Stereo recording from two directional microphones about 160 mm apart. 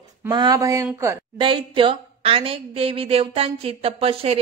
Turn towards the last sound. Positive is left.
turn(degrees=-35)  # may be behind; listen again after turning